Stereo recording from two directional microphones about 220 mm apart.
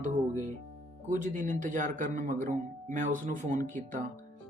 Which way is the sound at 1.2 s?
35° right (ahead or behind).